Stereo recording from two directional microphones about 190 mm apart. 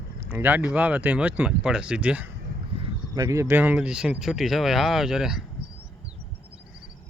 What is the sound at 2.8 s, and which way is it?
Speech, 20° right (ahead or behind).